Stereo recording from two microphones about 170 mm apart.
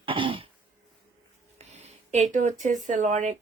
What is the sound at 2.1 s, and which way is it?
A woman's voice, 45° right (ahead or behind).